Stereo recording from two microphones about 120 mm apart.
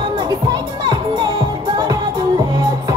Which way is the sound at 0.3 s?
35° right (ahead or behind).